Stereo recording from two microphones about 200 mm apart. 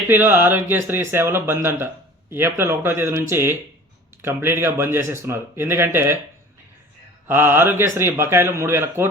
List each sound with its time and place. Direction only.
0.1 s speech: 10° right (ahead or behind)
7.3 s speech: 10° right (ahead or behind)